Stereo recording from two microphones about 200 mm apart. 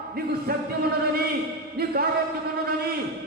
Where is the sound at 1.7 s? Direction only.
50° right (ahead or behind).